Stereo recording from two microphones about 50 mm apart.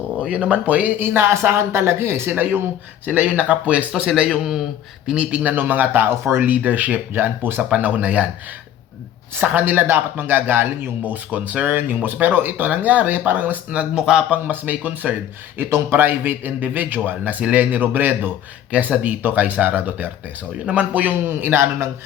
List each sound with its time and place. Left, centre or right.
0.3 s speech: right
0.9 s speech: right
2.3 s speech: right
3.1 s speech: right
4.0 s a man's voice: centre; by 6.1 s right
6.1 s speech: right
6.4 s speech: right
9.4 s speech: right
11.1 s speech: right
14.0 s a man's voice: centre
14.3 s speech: right
15.5 s speech: right
21.2 s speech: right